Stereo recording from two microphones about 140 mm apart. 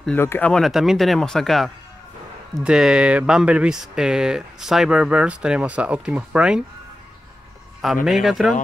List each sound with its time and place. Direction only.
0.0 s speech: 15° left (ahead or behind)
0.5 s speech: centre (ahead or behind)
7.8 s speech: 5° right (ahead or behind)